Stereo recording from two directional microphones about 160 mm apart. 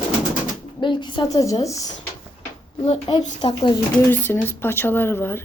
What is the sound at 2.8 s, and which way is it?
A woman's voice, 35° left (ahead or behind).